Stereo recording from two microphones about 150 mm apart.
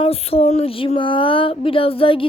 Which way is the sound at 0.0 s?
40° left (ahead or behind).